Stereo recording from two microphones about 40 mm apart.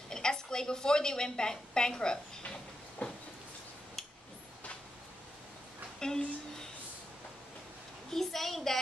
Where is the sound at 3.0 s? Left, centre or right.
Left.